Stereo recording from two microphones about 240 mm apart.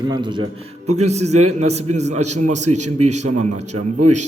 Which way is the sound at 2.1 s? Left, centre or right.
Right.